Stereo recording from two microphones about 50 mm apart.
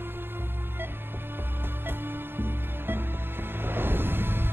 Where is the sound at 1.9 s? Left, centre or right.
Right.